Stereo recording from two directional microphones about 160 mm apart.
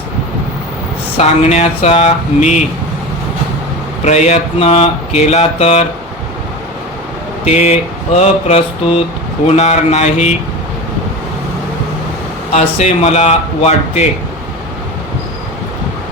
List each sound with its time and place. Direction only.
1.1 s speech: 45° left (ahead or behind)
4.0 s speech: 45° left (ahead or behind)
7.4 s speech: 45° left (ahead or behind)
12.5 s speech: 45° left (ahead or behind)